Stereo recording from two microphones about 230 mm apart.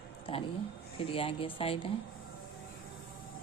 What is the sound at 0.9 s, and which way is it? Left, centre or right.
Speech, left.